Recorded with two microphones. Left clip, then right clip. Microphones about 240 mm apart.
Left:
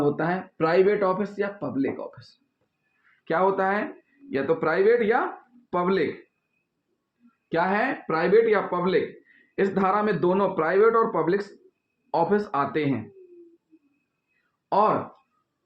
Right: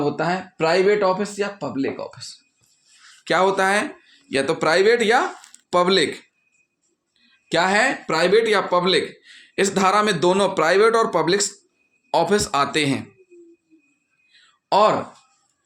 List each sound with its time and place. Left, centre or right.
0.0 s speech: right
3.2 s speech: right
7.5 s speech: right
14.7 s speech: right